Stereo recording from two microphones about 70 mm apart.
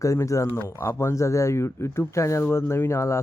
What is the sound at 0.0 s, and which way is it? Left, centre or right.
Speech, left.